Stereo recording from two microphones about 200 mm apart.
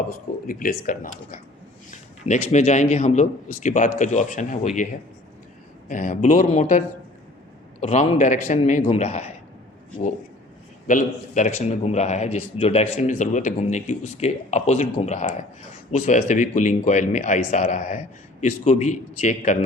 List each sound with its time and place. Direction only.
0.1 s speech: 45° left (ahead or behind)
2.5 s a man's voice: 35° left (ahead or behind)
5.9 s a man's voice: 40° left (ahead or behind)
10.8 s a man's voice: 40° left (ahead or behind)